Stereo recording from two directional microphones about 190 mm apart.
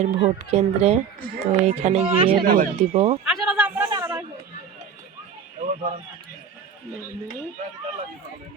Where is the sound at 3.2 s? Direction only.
Centre (ahead or behind).